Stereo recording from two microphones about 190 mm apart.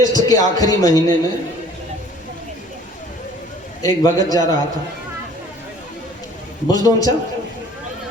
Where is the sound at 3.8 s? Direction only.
20° left (ahead or behind).